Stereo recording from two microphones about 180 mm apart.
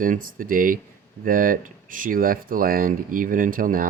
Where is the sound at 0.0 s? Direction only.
50° right (ahead or behind).